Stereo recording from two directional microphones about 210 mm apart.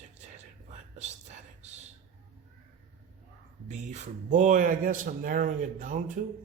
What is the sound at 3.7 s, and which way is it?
Speech, 35° right (ahead or behind).